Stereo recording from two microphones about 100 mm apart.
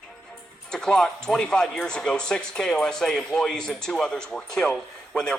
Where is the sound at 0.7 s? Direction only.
5° left (ahead or behind).